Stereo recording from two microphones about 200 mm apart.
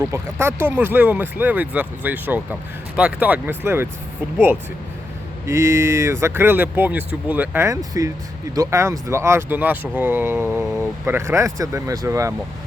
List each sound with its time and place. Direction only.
0.0 s speech: 15° right (ahead or behind)
5.5 s speech: 15° right (ahead or behind)